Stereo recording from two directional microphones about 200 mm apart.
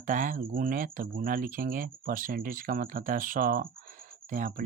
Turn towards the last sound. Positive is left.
turn(degrees=-40)  # may be behind; listen again after turning